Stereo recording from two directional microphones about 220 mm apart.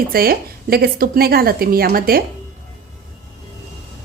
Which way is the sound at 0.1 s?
45° right (ahead or behind).